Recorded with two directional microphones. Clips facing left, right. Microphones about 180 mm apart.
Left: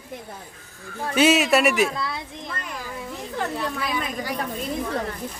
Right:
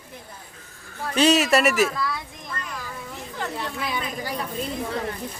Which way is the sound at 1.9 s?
25° left (ahead or behind).